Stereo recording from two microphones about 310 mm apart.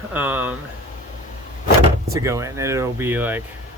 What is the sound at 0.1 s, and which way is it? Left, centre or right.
Speech, centre.